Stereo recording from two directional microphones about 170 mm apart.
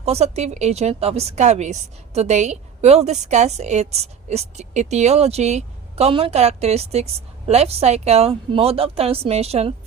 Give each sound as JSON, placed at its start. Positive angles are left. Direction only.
{"t": 0.0, "sound": "a woman's voice", "side_deg": -40}